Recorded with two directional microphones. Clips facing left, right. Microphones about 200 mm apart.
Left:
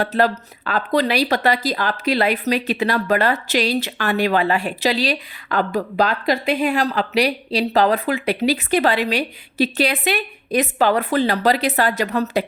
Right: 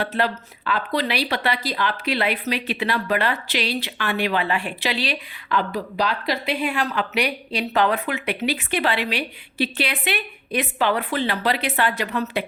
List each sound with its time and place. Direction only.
0.0 s speech: 40° left (ahead or behind)